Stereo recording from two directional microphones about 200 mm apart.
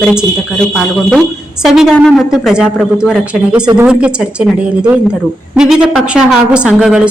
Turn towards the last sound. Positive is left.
turn(degrees=-5)  # may be behind; listen again after turning